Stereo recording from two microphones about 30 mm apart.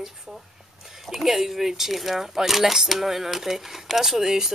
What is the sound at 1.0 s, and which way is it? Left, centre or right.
Speech, centre.